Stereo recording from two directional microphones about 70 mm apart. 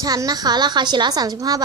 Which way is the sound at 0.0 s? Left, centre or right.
Right.